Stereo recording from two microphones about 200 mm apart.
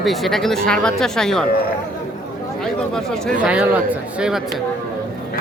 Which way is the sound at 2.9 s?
Centre (ahead or behind).